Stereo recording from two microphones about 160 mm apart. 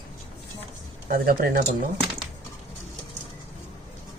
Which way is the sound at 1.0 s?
70° right (ahead or behind).